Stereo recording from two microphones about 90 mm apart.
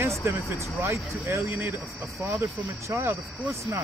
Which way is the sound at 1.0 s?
Centre (ahead or behind).